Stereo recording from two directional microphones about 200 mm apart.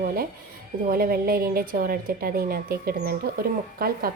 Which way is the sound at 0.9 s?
45° right (ahead or behind).